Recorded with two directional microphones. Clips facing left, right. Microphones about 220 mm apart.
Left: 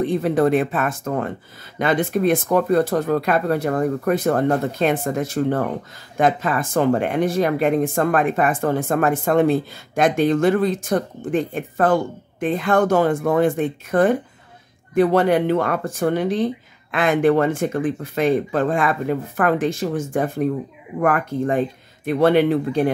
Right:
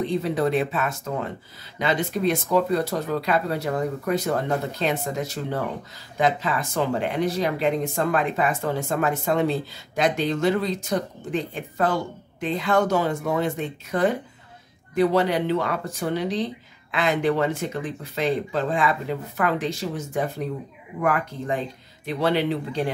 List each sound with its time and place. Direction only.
0.0 s speech: 50° left (ahead or behind)